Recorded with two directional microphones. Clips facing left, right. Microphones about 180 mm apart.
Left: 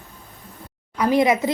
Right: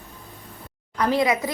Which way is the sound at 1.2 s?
20° left (ahead or behind).